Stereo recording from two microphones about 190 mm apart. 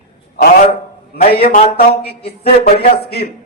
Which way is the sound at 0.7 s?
50° left (ahead or behind).